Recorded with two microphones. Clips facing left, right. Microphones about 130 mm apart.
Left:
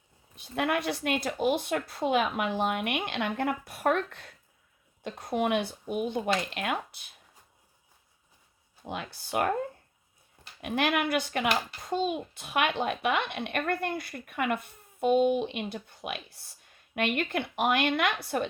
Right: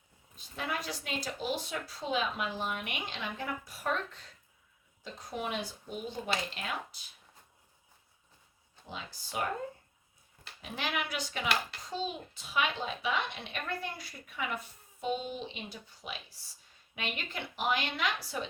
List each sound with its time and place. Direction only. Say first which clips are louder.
0.3 s a child's voice: left 9 dB; 65° left (ahead or behind)
8.9 s a child's voice: left 8 dB; 60° left (ahead or behind)
10.6 s a child's voice: left 9 dB; 60° left (ahead or behind)